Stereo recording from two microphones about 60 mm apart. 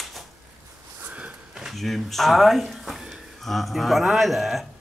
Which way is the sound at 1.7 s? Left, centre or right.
Centre.